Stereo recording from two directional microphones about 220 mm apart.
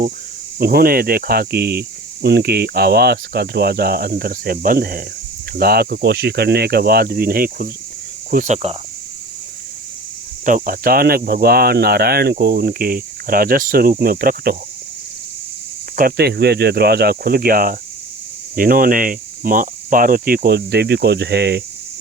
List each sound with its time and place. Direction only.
0.6 s speech: 45° right (ahead or behind)
10.4 s speech: 40° right (ahead or behind)
16.0 s speech: 45° right (ahead or behind)